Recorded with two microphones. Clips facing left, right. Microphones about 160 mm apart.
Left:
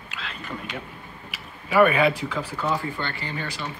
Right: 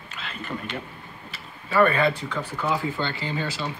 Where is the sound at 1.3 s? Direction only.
10° left (ahead or behind).